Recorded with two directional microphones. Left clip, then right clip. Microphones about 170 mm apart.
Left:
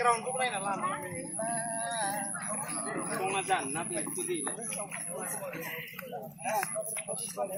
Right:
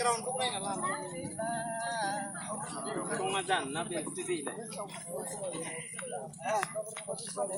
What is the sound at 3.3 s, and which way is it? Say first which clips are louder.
Speech: left 1 dB; 50° left (ahead or behind).